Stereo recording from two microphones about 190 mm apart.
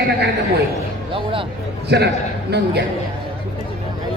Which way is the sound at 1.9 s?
60° right (ahead or behind).